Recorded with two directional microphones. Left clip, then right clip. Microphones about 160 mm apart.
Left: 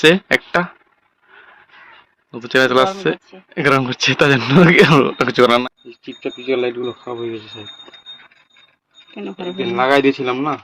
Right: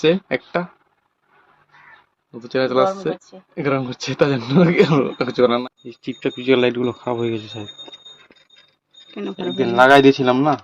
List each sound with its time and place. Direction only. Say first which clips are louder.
0.0 s speech: left 5 dB; centre (ahead or behind)
2.3 s speech: left 5 dB; centre (ahead or behind)
5.9 s speech: right 2 dB; 65° right (ahead or behind); by 7.6 s 90° right
9.6 s speech: right 3 dB; 75° right (ahead or behind)